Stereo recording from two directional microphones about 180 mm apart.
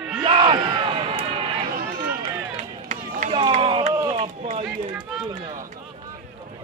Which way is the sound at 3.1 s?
35° right (ahead or behind).